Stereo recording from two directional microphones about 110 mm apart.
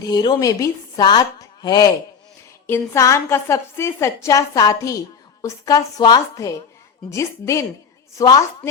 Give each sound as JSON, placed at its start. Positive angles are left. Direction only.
{"t": 0.0, "sound": "speech", "side_deg": 40}
{"t": 2.6, "sound": "a woman's voice", "side_deg": 25}